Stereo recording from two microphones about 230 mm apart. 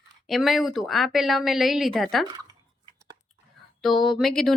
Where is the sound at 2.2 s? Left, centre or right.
Centre.